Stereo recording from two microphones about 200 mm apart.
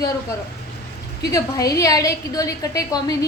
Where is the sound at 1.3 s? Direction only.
15° left (ahead or behind).